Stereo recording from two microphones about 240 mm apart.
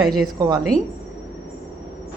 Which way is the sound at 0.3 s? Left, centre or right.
Centre.